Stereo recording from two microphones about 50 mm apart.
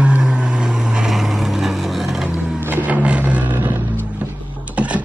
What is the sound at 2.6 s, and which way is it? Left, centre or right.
Vehicle, right.